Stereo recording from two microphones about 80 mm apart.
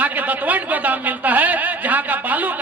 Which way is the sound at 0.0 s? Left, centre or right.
Right.